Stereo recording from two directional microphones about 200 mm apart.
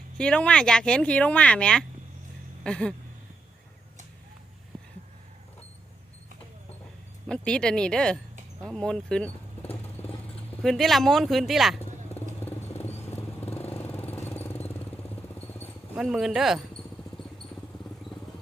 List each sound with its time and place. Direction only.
0.2 s speech: 5° left (ahead or behind)
7.3 s speech: 5° left (ahead or behind)
10.0 s vehicle: 30° left (ahead or behind)
10.6 s speech: centre (ahead or behind)
12.1 s vehicle: 30° left (ahead or behind)
13.0 s vehicle: 10° left (ahead or behind)
15.4 s a sound: 10° left (ahead or behind)
16.0 s a sound: centre (ahead or behind)